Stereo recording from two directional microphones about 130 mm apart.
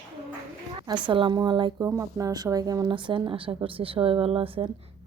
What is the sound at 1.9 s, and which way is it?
Speech, 25° right (ahead or behind).